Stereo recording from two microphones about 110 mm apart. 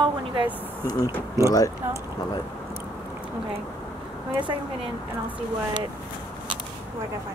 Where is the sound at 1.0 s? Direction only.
25° right (ahead or behind).